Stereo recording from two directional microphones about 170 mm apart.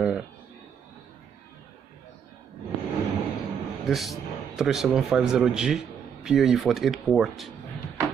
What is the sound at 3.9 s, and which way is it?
A man's voice, centre (ahead or behind).